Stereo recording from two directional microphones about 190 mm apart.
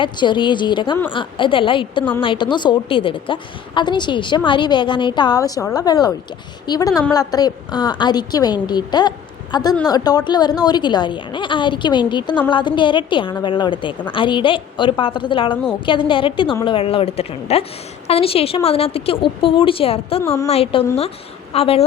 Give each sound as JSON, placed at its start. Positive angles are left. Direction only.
{"t": 0.0, "sound": "a woman's voice", "side_deg": 25}
{"t": 20.2, "sound": "a woman's voice", "side_deg": 15}
{"t": 20.5, "sound": "speech", "side_deg": 30}